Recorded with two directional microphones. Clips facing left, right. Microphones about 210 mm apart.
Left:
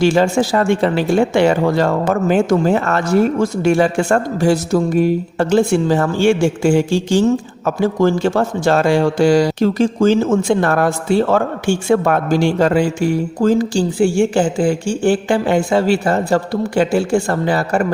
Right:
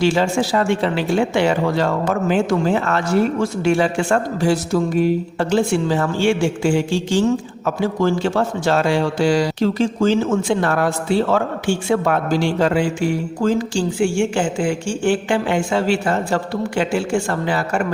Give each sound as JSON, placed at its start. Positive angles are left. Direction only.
{"t": 0.0, "sound": "a man's voice", "side_deg": 50}